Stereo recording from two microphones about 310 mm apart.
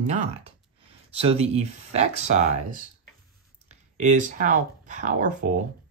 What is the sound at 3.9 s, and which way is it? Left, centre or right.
Speech, right.